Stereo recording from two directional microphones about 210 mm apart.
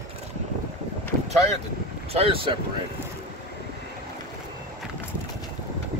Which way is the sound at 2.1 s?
25° right (ahead or behind).